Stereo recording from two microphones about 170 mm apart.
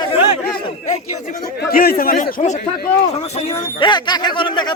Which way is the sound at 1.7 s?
65° left (ahead or behind).